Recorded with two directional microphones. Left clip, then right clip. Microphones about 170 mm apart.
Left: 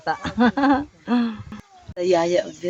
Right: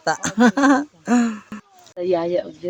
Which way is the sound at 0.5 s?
20° right (ahead or behind).